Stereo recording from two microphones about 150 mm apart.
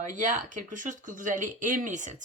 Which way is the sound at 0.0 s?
60° right (ahead or behind).